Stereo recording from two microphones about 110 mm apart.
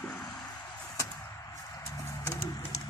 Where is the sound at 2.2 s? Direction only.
30° left (ahead or behind).